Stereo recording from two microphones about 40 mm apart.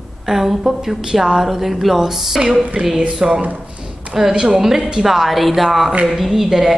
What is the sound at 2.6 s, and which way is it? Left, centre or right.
Speech, right.